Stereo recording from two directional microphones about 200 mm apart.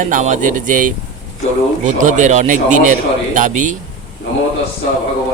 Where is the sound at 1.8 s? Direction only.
40° right (ahead or behind).